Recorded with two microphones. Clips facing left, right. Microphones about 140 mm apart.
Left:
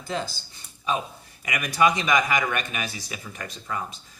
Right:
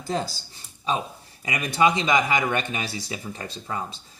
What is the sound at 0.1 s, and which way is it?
Speech, 35° right (ahead or behind).